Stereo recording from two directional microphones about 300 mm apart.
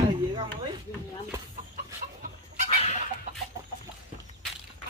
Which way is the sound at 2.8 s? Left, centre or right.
Left.